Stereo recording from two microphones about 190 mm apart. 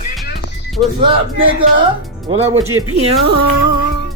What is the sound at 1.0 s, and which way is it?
A man's voice, 25° right (ahead or behind).